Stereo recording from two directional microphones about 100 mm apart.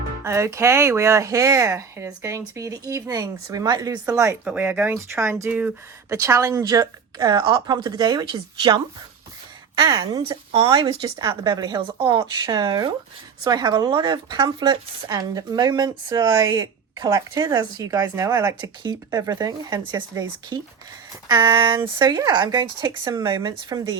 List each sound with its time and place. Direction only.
0.3 s speech: 30° right (ahead or behind)
4.4 s speech: 15° right (ahead or behind)
5.5 s speech: 15° right (ahead or behind)
6.1 s a woman's voice: 30° right (ahead or behind)
10.2 s a woman's voice: 60° right (ahead or behind); by 11.8 s 40° right (ahead or behind)
11.8 s a woman's voice: 55° right (ahead or behind)